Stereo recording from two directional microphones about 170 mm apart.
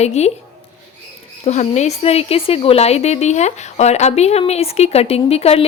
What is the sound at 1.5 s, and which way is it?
A woman's voice, 40° left (ahead or behind).